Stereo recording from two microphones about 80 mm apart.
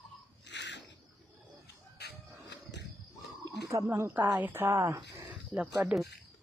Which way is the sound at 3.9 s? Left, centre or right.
Right.